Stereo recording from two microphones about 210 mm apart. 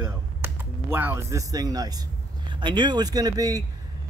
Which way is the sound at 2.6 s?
20° right (ahead or behind).